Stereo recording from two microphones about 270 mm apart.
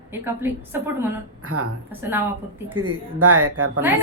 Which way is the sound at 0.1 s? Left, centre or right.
Centre.